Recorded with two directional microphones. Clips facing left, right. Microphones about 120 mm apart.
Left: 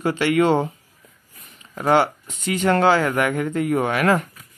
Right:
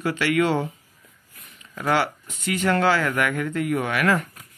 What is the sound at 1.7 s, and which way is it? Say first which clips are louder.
Speech: left 5 dB; 30° left (ahead or behind).